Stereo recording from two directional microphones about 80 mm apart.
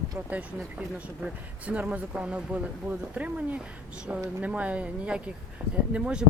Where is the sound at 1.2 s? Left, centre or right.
Centre.